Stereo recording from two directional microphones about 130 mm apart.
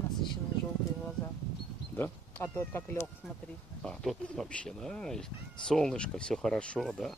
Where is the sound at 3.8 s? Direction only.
5° left (ahead or behind).